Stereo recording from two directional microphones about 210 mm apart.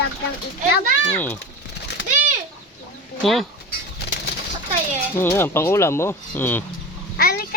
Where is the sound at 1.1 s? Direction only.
10° left (ahead or behind).